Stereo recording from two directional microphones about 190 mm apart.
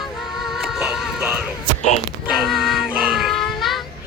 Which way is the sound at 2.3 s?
Centre (ahead or behind).